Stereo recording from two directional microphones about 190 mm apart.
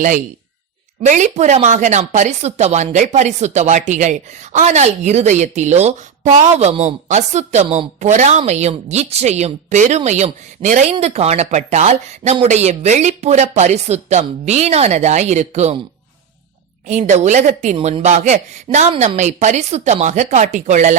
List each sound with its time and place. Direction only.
1.0 s a woman's voice: 40° right (ahead or behind)
16.8 s a woman's voice: 35° right (ahead or behind)